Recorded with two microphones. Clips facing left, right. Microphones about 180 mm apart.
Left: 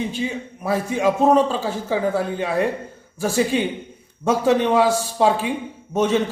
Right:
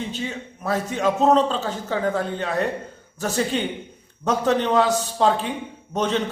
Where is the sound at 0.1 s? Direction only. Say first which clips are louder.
Left 4 dB; 10° left (ahead or behind).